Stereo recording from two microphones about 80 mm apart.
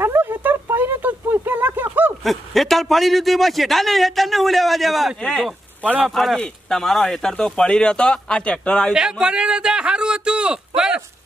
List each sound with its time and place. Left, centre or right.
0.0 s a sound: right
2.2 s a man's voice: centre
5.2 s a man's voice: centre
9.2 s speech: centre